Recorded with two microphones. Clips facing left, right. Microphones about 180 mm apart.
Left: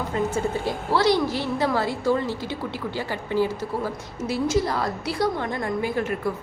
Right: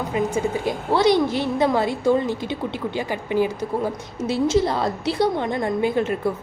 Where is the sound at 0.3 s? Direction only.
15° right (ahead or behind).